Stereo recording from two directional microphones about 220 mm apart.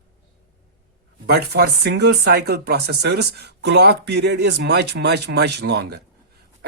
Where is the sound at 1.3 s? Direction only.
45° right (ahead or behind).